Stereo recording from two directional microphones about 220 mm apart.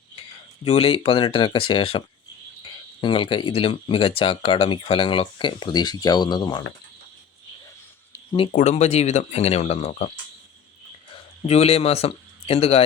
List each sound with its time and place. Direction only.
0.6 s speech: 25° left (ahead or behind)
8.1 s a sound: 15° left (ahead or behind)
8.5 s speech: 30° left (ahead or behind)
11.4 s speech: 25° left (ahead or behind)